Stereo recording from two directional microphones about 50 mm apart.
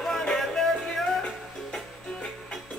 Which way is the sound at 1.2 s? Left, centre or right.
Left.